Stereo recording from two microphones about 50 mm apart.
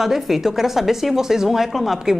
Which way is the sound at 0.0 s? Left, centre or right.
Centre.